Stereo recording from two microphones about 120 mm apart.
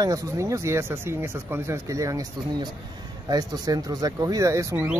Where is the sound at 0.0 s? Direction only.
25° right (ahead or behind).